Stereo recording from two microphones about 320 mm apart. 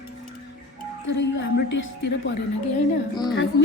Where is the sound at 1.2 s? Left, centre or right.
Left.